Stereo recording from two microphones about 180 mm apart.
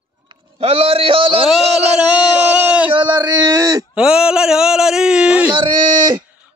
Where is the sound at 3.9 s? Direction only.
5° right (ahead or behind).